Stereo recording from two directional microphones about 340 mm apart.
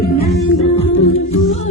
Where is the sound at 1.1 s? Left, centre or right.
Left.